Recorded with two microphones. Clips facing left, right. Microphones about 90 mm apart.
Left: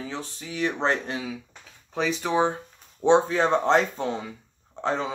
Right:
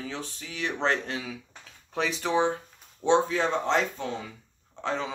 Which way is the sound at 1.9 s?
Centre (ahead or behind).